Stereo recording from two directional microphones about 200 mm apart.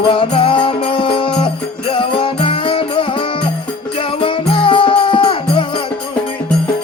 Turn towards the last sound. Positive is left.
turn(degrees=25)  # may be behind; listen again after turning